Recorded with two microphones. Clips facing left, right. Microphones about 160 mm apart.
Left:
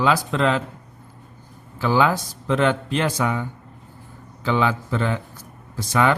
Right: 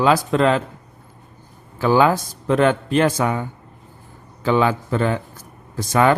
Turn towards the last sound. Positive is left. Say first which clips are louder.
# right 3 dB
turn(degrees=-45)  # may be behind; listen again after turning